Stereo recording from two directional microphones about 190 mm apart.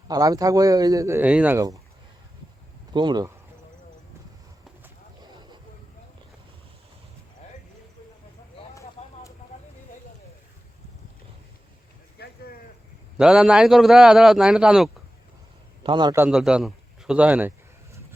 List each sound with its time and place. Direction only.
0.1 s speech: 20° right (ahead or behind)
2.9 s speech: 25° right (ahead or behind)
9.5 s a sound: 35° left (ahead or behind)
12.2 s a sound: 55° left (ahead or behind)
13.1 s a man's voice: 5° right (ahead or behind)
15.8 s a man's voice: 25° right (ahead or behind)
16.1 s speech: 5° right (ahead or behind)